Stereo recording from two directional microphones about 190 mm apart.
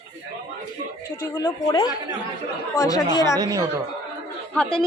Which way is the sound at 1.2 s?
25° left (ahead or behind).